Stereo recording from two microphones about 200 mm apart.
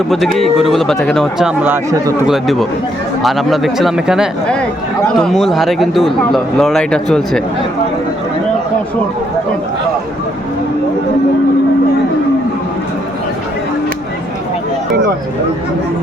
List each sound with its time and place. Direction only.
0.3 s speech: centre (ahead or behind)
2.2 s speech: centre (ahead or behind)